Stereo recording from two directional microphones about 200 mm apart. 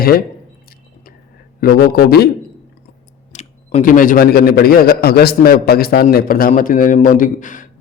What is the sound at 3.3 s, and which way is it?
A man's voice, 40° left (ahead or behind).